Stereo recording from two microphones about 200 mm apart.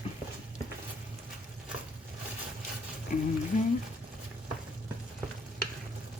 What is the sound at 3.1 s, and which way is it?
Speech, 40° left (ahead or behind).